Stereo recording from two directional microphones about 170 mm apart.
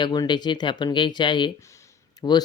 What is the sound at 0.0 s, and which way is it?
Speech, 25° left (ahead or behind).